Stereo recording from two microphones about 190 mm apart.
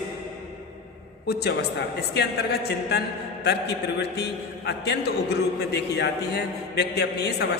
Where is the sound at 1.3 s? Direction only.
60° left (ahead or behind).